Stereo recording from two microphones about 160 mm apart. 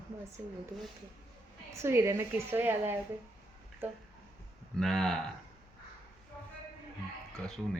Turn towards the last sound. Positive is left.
turn(degrees=5)  # may be behind; listen again after turning